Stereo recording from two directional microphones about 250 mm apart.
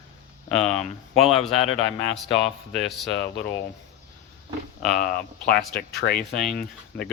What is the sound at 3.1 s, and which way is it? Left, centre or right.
Speech, left.